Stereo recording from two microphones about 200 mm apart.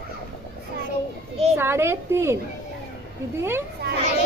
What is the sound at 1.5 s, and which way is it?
Speech, 10° right (ahead or behind).